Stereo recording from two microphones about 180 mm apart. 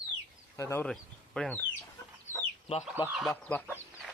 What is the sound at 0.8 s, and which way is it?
Speech, 5° left (ahead or behind).